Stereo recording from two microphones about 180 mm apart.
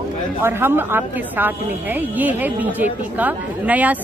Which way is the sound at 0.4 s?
10° right (ahead or behind).